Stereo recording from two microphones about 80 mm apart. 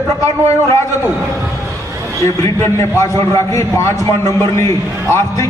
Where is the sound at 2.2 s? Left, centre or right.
Left.